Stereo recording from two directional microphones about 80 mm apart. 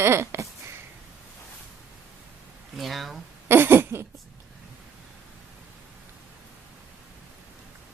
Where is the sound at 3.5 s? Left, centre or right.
Right.